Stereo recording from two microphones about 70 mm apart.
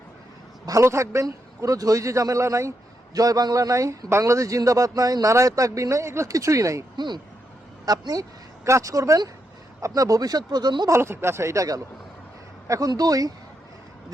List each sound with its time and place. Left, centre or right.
0.8 s speech: right
3.2 s speech: right
6.9 s speech: right
7.9 s speech: right
8.6 s speech: right
10.8 s speech: right
12.9 s speech: right